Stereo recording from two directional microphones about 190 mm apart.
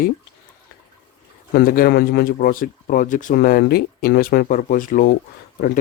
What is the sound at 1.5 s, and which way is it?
Speech, 50° left (ahead or behind).